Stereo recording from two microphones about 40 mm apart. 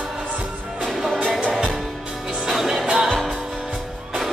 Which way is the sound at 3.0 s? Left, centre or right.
Centre.